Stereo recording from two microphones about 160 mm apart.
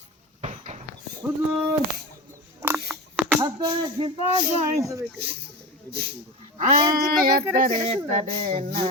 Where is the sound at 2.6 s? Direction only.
15° right (ahead or behind).